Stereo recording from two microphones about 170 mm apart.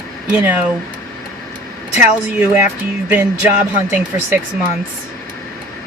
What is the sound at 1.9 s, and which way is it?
Speech, 10° right (ahead or behind).